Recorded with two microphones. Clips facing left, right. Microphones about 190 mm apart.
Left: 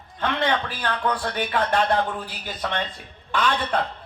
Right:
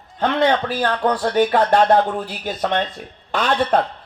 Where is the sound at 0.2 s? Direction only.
45° right (ahead or behind).